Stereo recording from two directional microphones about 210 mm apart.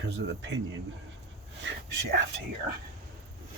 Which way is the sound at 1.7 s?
60° right (ahead or behind).